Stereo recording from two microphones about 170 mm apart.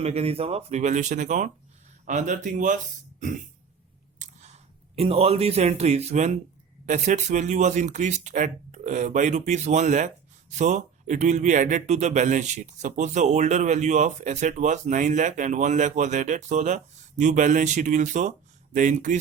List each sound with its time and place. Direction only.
0.0 s speech: 35° right (ahead or behind)